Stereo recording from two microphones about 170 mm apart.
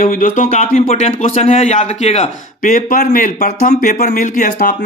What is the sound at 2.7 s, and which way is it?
A man's voice, 55° left (ahead or behind).